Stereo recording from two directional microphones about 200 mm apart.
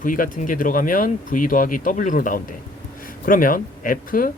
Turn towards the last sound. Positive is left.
turn(degrees=45)  # may be behind; listen again after turning